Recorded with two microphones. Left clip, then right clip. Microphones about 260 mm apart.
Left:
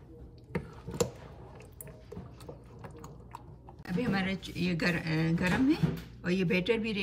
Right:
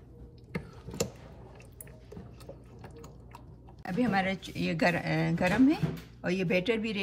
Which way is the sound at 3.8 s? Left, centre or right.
Right.